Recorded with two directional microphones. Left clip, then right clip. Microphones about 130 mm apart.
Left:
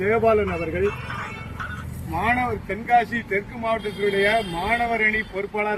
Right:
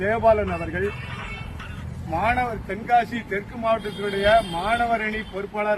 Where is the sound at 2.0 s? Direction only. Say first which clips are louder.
Even; 35° right (ahead or behind).